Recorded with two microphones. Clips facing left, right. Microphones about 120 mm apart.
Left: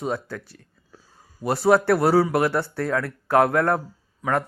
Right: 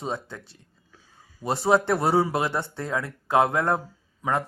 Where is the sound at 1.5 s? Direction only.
25° right (ahead or behind).